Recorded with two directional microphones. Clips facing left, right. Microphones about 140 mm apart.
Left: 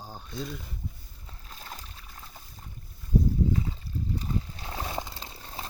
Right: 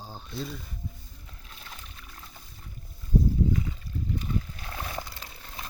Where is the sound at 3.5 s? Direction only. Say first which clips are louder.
Left 1 dB; 30° left (ahead or behind).